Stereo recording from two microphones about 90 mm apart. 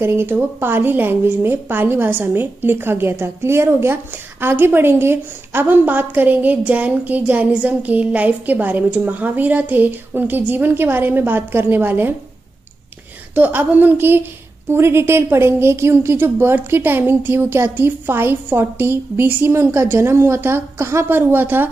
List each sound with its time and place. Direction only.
0.0 s a woman's voice: 25° right (ahead or behind)
13.3 s a woman's voice: 20° right (ahead or behind)